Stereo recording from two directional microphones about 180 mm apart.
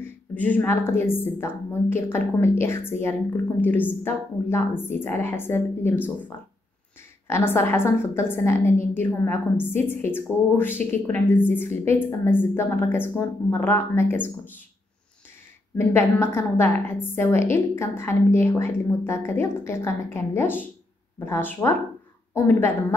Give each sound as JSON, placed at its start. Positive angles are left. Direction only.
{"t": 0.0, "sound": "a woman's voice", "side_deg": 10}
{"t": 15.8, "sound": "a woman's voice", "side_deg": 15}